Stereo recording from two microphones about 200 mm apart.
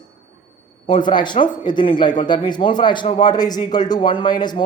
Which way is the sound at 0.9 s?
25° left (ahead or behind).